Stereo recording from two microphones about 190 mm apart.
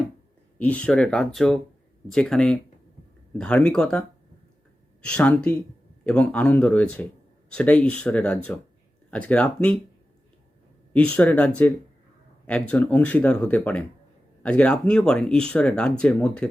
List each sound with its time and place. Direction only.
0.6 s speech: 5° left (ahead or behind)
5.0 s speech: 5° left (ahead or behind)
10.9 s speech: 5° left (ahead or behind)